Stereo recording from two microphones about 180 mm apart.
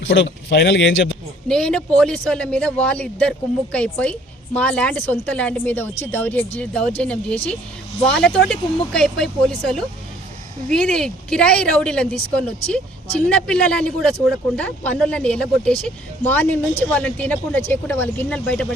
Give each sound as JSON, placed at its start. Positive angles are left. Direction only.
{"t": 0.1, "sound": "speech", "side_deg": 75}
{"t": 1.5, "sound": "speech", "side_deg": 5}